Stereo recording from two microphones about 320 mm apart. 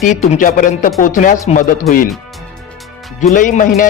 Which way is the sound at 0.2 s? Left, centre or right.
Left.